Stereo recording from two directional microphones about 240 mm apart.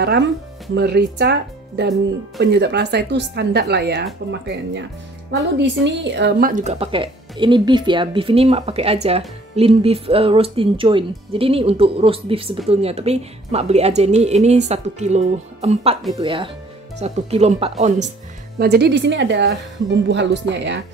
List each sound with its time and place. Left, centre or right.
0.7 s speech: right
6.5 s a woman's voice: right
18.6 s speech: right